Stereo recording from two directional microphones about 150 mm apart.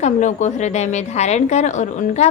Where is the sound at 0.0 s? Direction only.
55° left (ahead or behind).